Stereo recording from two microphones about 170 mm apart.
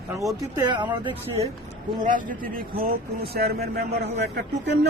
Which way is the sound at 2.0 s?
55° right (ahead or behind).